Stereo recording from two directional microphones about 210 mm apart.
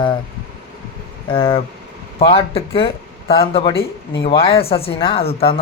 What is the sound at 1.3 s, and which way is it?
Speech, 25° left (ahead or behind).